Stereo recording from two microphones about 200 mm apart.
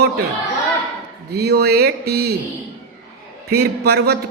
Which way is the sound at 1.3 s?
55° right (ahead or behind).